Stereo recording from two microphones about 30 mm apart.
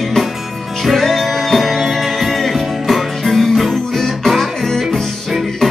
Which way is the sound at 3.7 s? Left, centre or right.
Centre.